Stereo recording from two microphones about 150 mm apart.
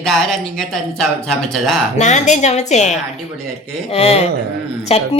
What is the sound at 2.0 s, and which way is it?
Speech, 50° left (ahead or behind).